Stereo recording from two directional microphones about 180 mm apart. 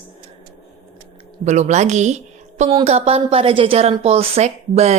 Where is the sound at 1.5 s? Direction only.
40° right (ahead or behind).